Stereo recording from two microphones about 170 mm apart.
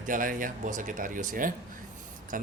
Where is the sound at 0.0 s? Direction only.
50° right (ahead or behind).